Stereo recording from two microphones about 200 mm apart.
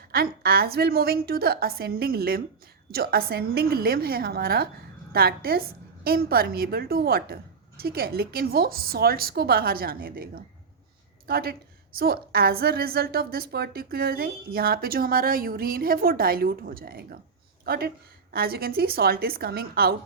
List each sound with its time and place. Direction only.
0.1 s a woman's voice: 50° right (ahead or behind)